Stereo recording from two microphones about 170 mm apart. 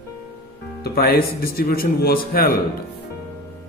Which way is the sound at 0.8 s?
65° left (ahead or behind).